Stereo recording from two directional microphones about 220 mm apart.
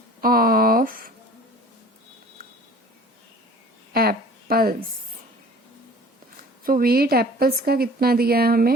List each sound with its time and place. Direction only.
0.2 s speech: 40° right (ahead or behind)
3.9 s a sound: 45° right (ahead or behind)
6.7 s a woman's voice: 40° right (ahead or behind)